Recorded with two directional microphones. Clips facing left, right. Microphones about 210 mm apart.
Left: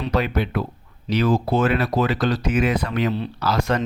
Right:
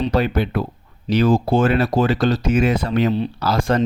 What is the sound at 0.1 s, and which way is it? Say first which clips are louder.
Speech: right 3 dB; 30° right (ahead or behind).